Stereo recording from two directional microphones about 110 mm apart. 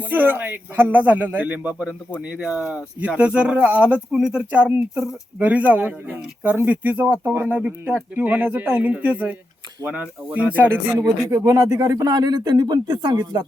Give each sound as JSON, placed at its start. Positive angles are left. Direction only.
{"t": 0.1, "sound": "speech", "side_deg": -15}
{"t": 11.3, "sound": "speech", "side_deg": -30}